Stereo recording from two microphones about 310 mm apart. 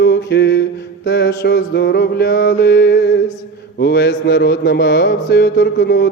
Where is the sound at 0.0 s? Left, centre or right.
Left.